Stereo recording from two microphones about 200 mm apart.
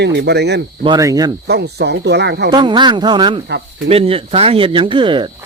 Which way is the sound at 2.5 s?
20° right (ahead or behind).